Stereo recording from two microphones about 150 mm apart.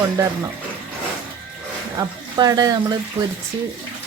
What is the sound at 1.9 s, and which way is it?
Speech, 25° right (ahead or behind).